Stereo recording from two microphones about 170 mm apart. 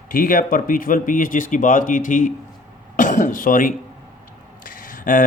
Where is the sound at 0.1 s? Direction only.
55° left (ahead or behind).